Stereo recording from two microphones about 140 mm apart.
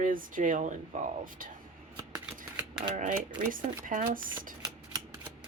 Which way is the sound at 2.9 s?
65° right (ahead or behind).